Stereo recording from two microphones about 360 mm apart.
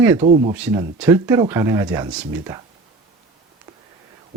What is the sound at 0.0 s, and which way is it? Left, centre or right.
Speech, centre.